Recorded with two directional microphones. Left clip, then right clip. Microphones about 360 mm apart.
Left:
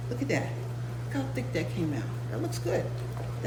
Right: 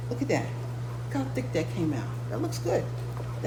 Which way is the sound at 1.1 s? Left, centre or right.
Centre.